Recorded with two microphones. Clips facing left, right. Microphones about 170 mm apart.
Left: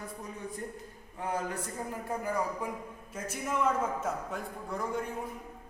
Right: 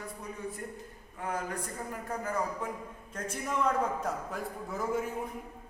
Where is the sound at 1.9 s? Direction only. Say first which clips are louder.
Left 1 dB; 20° left (ahead or behind).